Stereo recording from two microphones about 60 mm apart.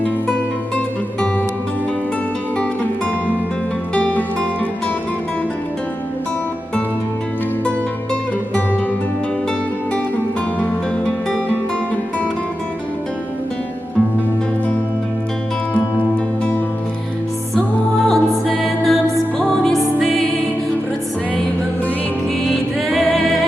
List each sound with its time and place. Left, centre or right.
3.9 s music: left
18.0 s music: centre
22.4 s music: centre